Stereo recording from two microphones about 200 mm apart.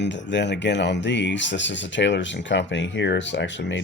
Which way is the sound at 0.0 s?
65° left (ahead or behind).